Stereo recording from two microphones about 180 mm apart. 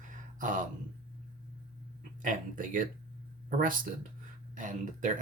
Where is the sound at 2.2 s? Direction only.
45° right (ahead or behind).